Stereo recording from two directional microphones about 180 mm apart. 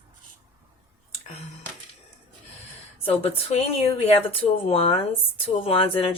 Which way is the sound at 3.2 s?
30° left (ahead or behind).